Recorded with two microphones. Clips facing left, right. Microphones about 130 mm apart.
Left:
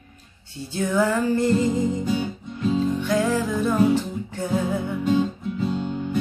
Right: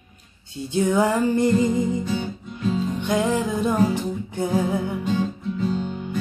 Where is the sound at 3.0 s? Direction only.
20° right (ahead or behind).